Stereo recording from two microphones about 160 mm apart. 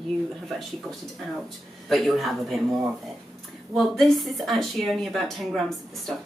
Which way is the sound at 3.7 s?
Centre (ahead or behind).